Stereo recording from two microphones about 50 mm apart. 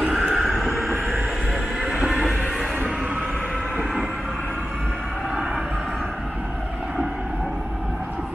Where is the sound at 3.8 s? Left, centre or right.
Centre.